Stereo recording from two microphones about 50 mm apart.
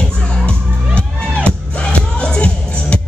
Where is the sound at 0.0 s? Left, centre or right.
Left.